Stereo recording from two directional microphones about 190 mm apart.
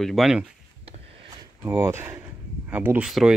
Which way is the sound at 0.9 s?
30° right (ahead or behind).